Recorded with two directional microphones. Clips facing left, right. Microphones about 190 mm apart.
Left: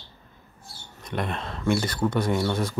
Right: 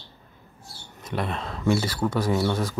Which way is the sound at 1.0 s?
5° right (ahead or behind).